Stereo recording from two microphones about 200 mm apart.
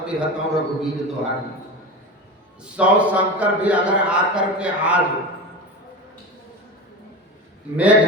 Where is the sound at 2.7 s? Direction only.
5° right (ahead or behind).